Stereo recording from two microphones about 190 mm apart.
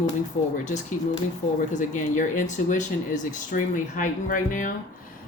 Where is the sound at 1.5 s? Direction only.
40° left (ahead or behind).